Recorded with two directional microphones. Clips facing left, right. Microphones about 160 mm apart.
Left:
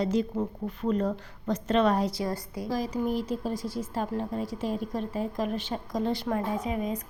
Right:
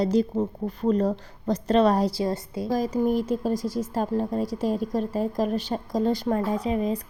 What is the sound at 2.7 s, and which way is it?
Speech, 45° right (ahead or behind).